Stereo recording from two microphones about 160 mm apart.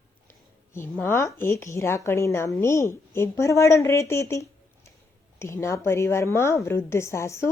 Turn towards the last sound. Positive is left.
turn(degrees=15)  # may be behind; listen again after turning